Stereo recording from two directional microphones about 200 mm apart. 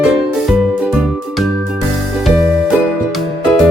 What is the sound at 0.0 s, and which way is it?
Music, centre (ahead or behind).